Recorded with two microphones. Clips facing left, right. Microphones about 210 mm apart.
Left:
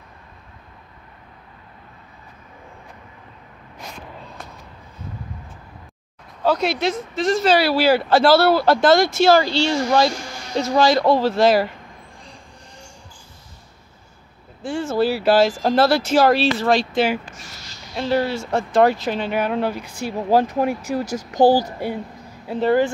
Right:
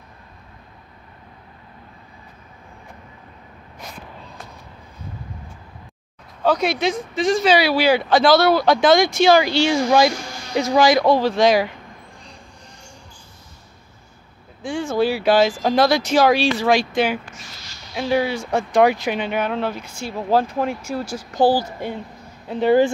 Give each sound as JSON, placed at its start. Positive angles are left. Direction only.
{"t": 6.4, "sound": "speech", "side_deg": 0}
{"t": 9.4, "sound": "speech", "side_deg": -15}
{"t": 11.1, "sound": "speech", "side_deg": 5}
{"t": 14.6, "sound": "speech", "side_deg": 5}
{"t": 17.9, "sound": "speech", "side_deg": -5}
{"t": 21.0, "sound": "speech", "side_deg": 40}
{"t": 21.4, "sound": "speech", "side_deg": 15}